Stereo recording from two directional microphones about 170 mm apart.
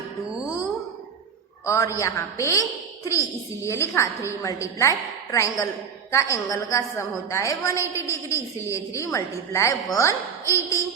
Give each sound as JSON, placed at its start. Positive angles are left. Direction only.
{"t": 1.6, "sound": "a woman's voice", "side_deg": 20}